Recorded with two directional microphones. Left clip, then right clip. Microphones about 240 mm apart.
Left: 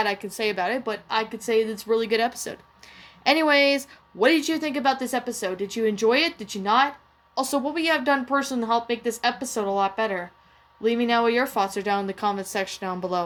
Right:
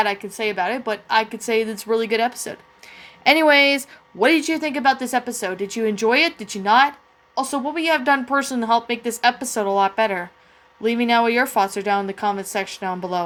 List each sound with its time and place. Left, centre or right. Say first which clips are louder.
0.0 s a woman's voice: right 4 dB; centre
7.3 s a woman's voice: right 2 dB; centre